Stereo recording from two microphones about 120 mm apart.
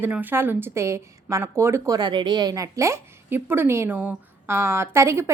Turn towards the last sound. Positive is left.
turn(degrees=-20)  # may be behind; listen again after turning